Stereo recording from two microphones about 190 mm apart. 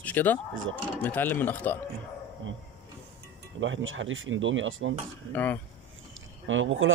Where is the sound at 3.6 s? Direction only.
90° right.